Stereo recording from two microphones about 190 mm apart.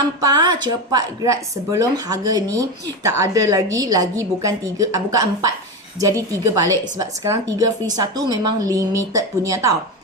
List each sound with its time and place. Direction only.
0.2 s speech: 20° right (ahead or behind)